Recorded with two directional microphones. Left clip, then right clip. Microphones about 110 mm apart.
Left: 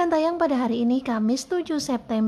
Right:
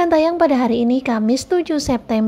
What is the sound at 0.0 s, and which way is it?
A woman's voice, 20° right (ahead or behind).